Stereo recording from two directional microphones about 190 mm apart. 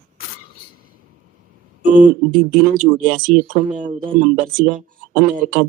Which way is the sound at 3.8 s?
45° right (ahead or behind).